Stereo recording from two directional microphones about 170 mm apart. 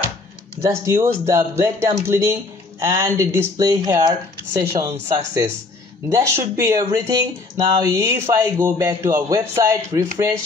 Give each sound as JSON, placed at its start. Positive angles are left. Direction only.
{"t": 0.6, "sound": "a man's voice", "side_deg": -15}